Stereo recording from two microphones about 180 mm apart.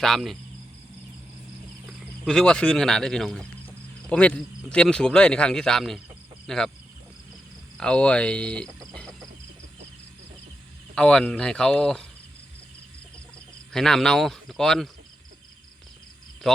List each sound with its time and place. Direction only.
0.0 s speech: centre (ahead or behind)
1.9 s speech: centre (ahead or behind)
7.8 s speech: 5° left (ahead or behind)
10.9 s speech: 5° left (ahead or behind)
13.7 s speech: 5° left (ahead or behind)